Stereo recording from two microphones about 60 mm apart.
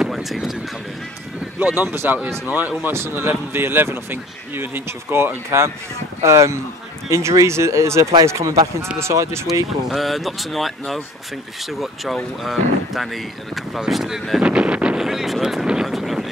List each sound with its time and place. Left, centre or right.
0.0 s vehicle: centre
1.6 s speech: right
2.8 s speech: right
6.2 s speech: right
9.8 s speech: centre
14.4 s speech: centre
15.0 s a sound: centre